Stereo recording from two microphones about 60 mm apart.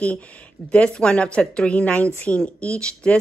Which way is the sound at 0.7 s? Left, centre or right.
Centre.